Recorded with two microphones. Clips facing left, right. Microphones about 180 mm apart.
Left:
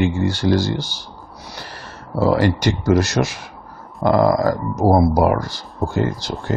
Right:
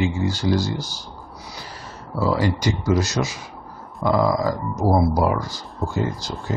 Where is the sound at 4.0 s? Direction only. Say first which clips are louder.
Left 4 dB; 60° left (ahead or behind).